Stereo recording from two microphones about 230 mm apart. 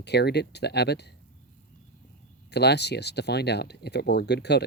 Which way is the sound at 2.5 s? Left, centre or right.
Left.